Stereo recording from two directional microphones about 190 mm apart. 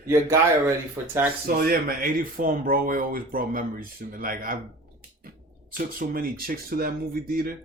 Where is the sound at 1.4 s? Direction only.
50° right (ahead or behind).